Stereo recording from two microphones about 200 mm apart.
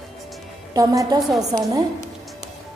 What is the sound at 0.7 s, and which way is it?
Speech, 20° right (ahead or behind).